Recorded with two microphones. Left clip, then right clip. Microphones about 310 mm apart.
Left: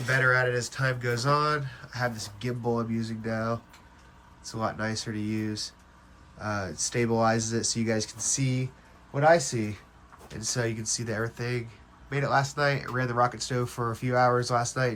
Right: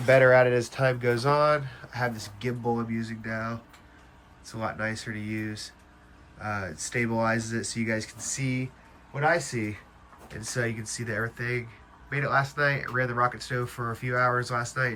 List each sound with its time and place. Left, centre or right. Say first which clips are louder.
0.1 s speech: right 6 dB; centre